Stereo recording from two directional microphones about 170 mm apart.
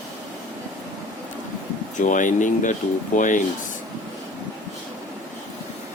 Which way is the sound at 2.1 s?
50° left (ahead or behind).